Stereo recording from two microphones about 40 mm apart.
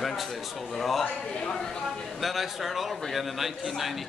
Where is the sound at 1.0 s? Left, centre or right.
Left.